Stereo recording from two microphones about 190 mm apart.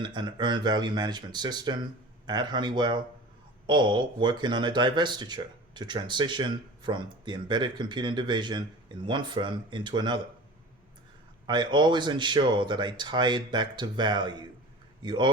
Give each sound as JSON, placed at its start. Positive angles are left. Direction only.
{"t": 0.0, "sound": "speech", "side_deg": -25}
{"t": 11.4, "sound": "speech", "side_deg": -25}